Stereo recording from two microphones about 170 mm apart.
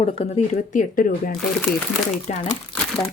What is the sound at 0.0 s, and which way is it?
Speech, 35° left (ahead or behind).